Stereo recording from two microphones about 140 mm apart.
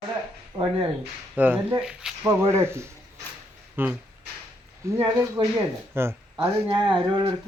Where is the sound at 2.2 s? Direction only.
20° right (ahead or behind).